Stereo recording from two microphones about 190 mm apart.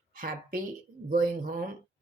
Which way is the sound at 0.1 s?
45° right (ahead or behind).